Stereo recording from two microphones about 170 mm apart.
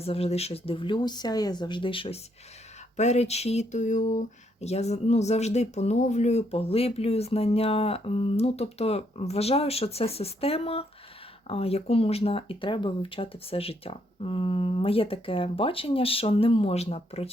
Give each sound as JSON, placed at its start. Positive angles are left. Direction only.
{"t": 0.0, "sound": "speech", "side_deg": 35}